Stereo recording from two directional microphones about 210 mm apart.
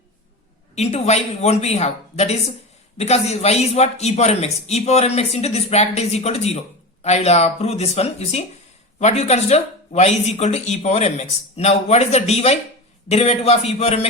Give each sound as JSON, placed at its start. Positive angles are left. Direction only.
{"t": 0.8, "sound": "a man's voice", "side_deg": 30}